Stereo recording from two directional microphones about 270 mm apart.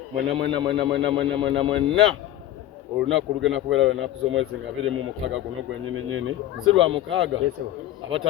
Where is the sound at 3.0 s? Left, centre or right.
Right.